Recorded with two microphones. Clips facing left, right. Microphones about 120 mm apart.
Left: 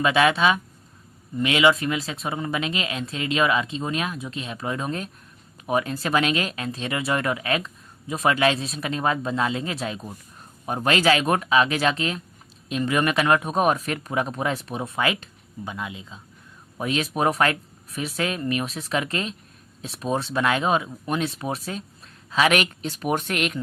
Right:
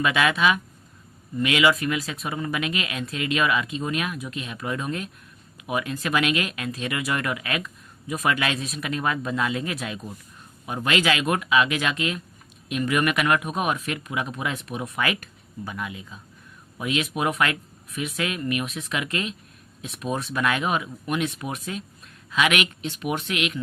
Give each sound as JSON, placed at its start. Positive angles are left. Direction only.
{"t": 0.0, "sound": "speech", "side_deg": 30}
{"t": 16.7, "sound": "speech", "side_deg": 35}